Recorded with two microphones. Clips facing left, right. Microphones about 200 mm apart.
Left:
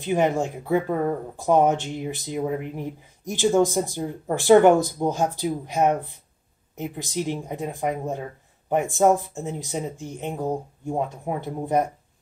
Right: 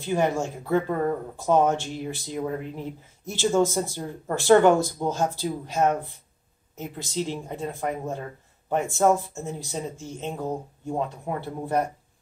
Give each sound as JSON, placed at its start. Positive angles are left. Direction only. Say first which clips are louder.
{"t": 0.0, "sound": "speech", "louder": "left 2 dB", "side_deg": 20}